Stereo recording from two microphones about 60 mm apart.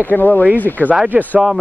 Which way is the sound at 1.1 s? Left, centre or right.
Right.